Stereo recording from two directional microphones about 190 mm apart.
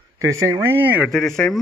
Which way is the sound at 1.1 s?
5° left (ahead or behind).